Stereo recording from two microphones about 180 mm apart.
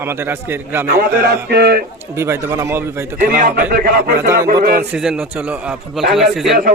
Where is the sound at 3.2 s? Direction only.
50° right (ahead or behind).